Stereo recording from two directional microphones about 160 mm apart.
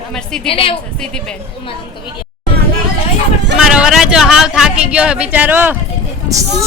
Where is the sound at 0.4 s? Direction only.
35° left (ahead or behind).